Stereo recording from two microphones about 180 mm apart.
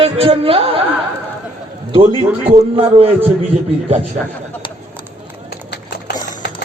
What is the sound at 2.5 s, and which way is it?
Speech, 35° right (ahead or behind).